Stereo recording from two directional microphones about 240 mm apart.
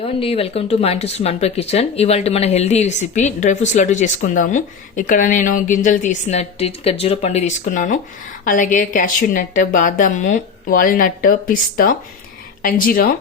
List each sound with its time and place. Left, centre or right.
0.0 s a woman's voice: left